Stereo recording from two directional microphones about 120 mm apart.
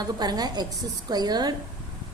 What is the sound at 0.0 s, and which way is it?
A woman's voice, 35° right (ahead or behind).